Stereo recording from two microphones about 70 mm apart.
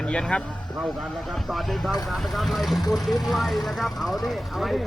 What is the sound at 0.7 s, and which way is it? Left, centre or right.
Speech, centre.